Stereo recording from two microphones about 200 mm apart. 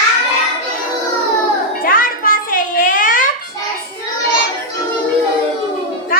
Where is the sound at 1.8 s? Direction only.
45° left (ahead or behind).